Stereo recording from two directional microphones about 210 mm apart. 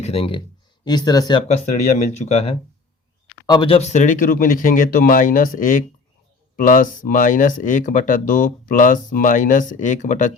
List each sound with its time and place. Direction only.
0.0 s speech: 25° left (ahead or behind)